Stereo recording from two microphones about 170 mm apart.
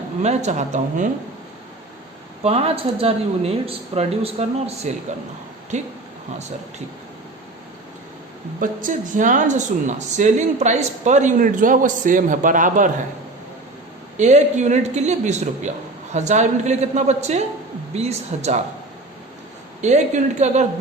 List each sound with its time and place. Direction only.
0.2 s speech: 40° right (ahead or behind)
2.4 s speech: 35° right (ahead or behind)
8.6 s speech: 50° right (ahead or behind)
14.2 s speech: 45° right (ahead or behind)
19.8 s speech: 45° right (ahead or behind)